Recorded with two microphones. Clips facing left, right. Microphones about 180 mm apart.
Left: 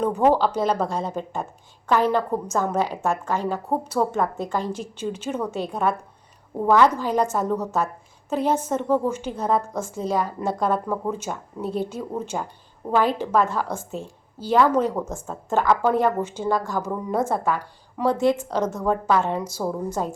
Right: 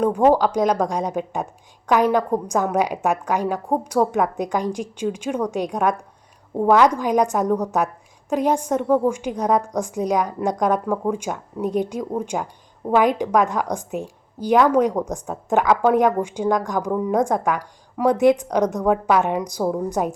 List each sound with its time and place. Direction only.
0.0 s a woman's voice: 10° right (ahead or behind)